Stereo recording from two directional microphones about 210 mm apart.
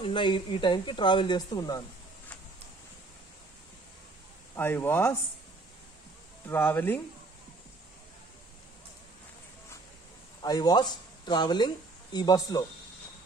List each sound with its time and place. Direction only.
0.0 s speech: 20° left (ahead or behind)
4.6 s speech: 10° left (ahead or behind)
6.4 s speech: 10° left (ahead or behind)
10.4 s speech: 20° left (ahead or behind)